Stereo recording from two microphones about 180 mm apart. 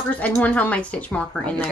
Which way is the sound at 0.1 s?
10° left (ahead or behind).